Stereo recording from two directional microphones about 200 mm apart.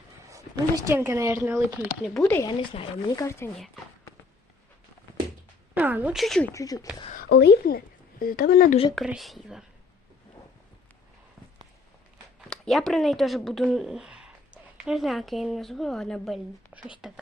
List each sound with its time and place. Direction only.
0.3 s speech: 15° right (ahead or behind)
2.1 s speech: 10° left (ahead or behind)
2.5 s speech: 25° left (ahead or behind)
5.7 s speech: 10° right (ahead or behind)
6.5 s speech: 15° left (ahead or behind)
7.2 s a woman's voice: 55° left (ahead or behind)
9.0 s speech: centre (ahead or behind)
12.5 s speech: centre (ahead or behind)